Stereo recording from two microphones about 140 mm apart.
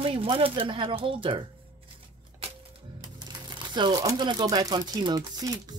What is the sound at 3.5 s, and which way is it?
Speech, 30° right (ahead or behind).